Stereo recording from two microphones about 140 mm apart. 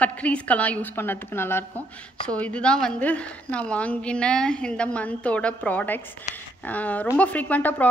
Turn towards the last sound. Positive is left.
turn(degrees=10)  # may be behind; listen again after turning